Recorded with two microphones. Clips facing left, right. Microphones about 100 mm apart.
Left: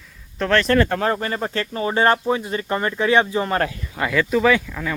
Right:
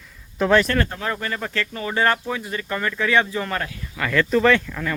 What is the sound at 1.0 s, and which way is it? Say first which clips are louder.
Speech: left 5 dB; 30° left (ahead or behind).